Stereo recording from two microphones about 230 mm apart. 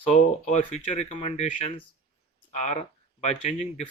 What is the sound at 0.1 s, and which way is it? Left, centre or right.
Speech, left.